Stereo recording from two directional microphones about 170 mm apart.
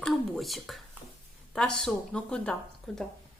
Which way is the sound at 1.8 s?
5° left (ahead or behind).